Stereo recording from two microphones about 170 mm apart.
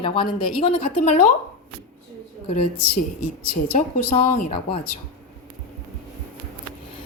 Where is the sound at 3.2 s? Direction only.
50° left (ahead or behind).